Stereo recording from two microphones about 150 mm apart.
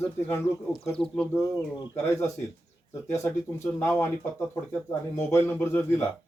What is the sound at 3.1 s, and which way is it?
Speech, 15° left (ahead or behind).